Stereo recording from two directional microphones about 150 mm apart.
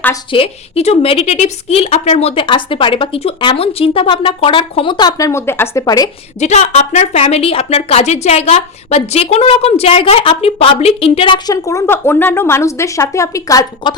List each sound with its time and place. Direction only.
0.3 s speech: 40° left (ahead or behind)
6.4 s speech: 45° left (ahead or behind); by 13.9 s 25° left (ahead or behind)